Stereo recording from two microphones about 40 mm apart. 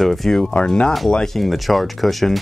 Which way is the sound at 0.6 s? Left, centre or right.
Left.